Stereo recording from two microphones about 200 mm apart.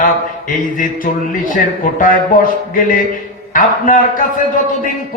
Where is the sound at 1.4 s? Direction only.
40° left (ahead or behind).